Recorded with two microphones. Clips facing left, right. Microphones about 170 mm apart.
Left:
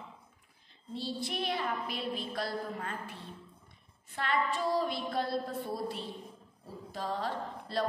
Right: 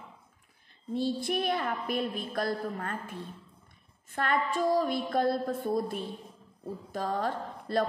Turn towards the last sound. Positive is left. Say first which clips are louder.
# right 5 dB
turn(degrees=-50)  # may be behind; listen again after turning